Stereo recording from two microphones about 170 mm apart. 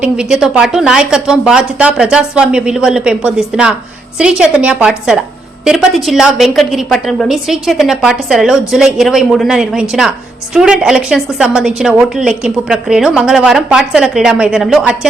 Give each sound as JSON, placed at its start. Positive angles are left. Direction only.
{"t": 0.0, "sound": "a woman's voice", "side_deg": -5}